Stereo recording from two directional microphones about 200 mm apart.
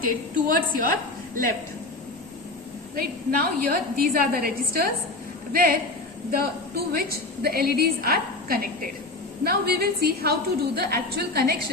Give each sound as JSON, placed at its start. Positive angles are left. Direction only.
{"t": 0.0, "sound": "a woman's voice", "side_deg": -45}
{"t": 2.9, "sound": "a woman's voice", "side_deg": -45}